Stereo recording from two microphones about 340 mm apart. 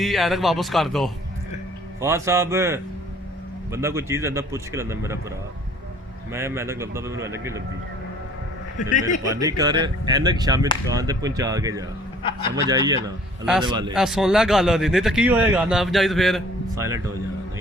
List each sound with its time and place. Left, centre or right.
0.0 s a man's voice: centre
6.3 s a man's voice: centre
8.8 s a man's voice: left
9.2 s a man's voice: centre
13.9 s a man's voice: centre